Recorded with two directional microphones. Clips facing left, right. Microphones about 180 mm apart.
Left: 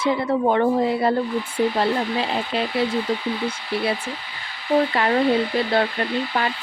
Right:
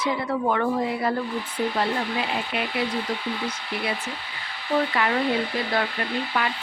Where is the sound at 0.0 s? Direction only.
25° left (ahead or behind).